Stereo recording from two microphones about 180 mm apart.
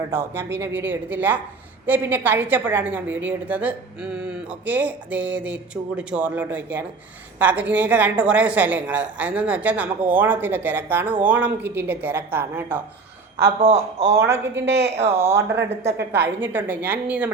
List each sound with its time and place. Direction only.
0.1 s a woman's voice: 15° right (ahead or behind)
13.6 s speech: 35° right (ahead or behind)
14.1 s a woman's voice: 15° right (ahead or behind)
14.6 s a woman's voice: 65° right (ahead or behind)
15.0 s a woman's voice: 15° right (ahead or behind)